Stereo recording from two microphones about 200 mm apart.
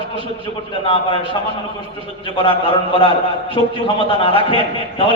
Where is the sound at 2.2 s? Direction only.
25° left (ahead or behind).